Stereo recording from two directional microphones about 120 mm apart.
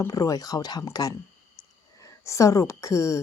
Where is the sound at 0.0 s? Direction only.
30° left (ahead or behind).